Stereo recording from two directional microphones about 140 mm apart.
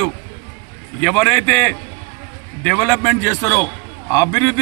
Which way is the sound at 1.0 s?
5° left (ahead or behind).